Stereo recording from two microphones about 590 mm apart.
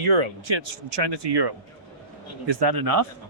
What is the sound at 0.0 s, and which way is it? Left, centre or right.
Speech, right.